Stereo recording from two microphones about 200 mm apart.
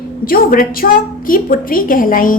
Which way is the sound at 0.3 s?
45° left (ahead or behind).